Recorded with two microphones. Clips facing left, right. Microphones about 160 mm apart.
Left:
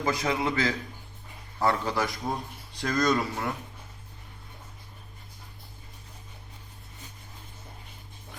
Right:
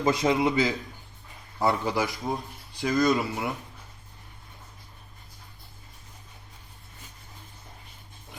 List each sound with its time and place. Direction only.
0.0 s a man's voice: 25° right (ahead or behind); by 3.5 s 5° right (ahead or behind)